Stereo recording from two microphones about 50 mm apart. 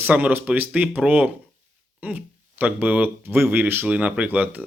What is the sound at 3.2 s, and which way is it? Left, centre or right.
Speech, right.